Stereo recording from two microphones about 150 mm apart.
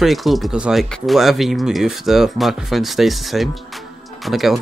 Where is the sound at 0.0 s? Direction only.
Centre (ahead or behind).